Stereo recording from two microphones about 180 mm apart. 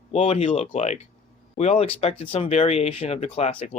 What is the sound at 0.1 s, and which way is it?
Speech, 35° left (ahead or behind).